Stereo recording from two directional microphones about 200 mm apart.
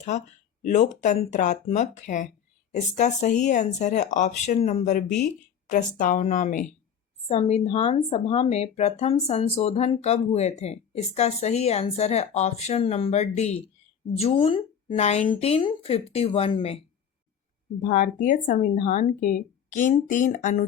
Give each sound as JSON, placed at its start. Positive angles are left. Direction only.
{"t": 0.6, "sound": "speech", "side_deg": 40}
{"t": 17.8, "sound": "speech", "side_deg": 40}